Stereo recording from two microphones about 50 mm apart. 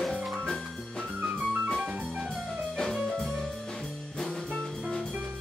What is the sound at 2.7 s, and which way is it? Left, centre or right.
Music, centre.